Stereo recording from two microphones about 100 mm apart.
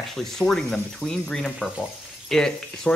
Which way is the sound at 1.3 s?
5° left (ahead or behind).